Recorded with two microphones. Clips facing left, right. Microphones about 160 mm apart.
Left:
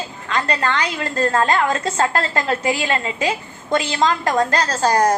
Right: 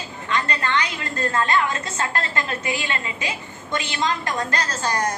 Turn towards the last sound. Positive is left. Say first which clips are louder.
# left 8 dB
turn(degrees=35)  # may be behind; listen again after turning